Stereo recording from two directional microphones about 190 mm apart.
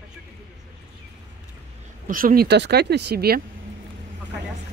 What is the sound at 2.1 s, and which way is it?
Speech, 45° right (ahead or behind).